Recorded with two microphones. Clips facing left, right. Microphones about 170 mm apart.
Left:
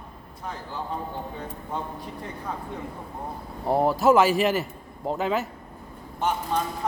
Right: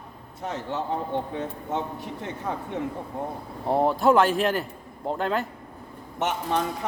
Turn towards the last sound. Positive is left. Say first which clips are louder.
# even
turn(degrees=-80)